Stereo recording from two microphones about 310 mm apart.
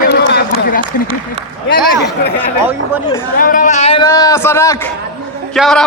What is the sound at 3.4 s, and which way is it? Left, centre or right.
A man's voice, left.